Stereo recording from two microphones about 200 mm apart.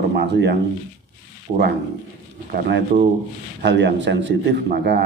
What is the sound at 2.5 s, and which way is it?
A man's voice, 50° right (ahead or behind).